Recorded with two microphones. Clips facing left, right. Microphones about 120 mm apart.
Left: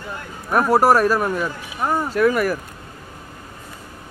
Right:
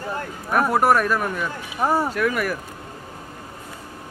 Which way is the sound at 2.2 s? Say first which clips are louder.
Left 5 dB; 35° left (ahead or behind).